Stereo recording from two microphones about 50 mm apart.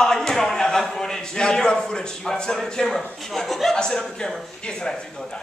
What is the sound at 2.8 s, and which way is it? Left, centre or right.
Speech, centre.